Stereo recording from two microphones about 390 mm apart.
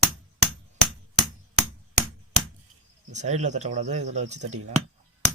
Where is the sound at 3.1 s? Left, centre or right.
Centre.